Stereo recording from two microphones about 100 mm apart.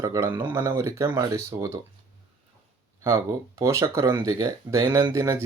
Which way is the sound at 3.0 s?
30° right (ahead or behind).